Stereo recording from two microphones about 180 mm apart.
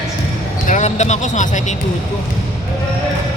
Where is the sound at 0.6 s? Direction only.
40° left (ahead or behind).